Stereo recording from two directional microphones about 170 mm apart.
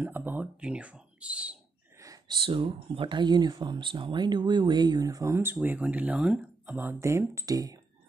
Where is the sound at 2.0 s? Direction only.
25° right (ahead or behind).